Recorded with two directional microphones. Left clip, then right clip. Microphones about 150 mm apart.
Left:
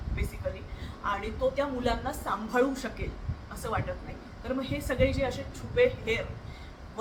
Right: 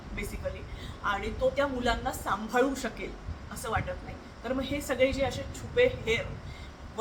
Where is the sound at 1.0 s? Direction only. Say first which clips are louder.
Right 1 dB; 5° right (ahead or behind).